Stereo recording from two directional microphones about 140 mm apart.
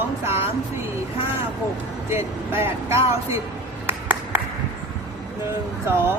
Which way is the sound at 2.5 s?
15° right (ahead or behind).